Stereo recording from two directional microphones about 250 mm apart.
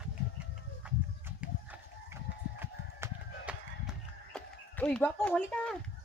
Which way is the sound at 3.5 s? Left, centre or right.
Centre.